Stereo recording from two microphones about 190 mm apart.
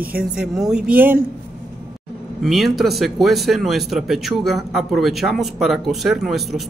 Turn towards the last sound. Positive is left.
turn(degrees=0)  # may be behind; listen again after turning